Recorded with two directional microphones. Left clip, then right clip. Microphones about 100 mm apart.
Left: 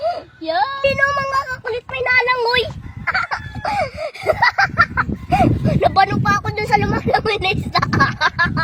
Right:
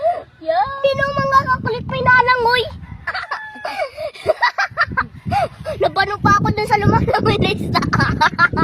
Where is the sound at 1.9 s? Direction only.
30° right (ahead or behind).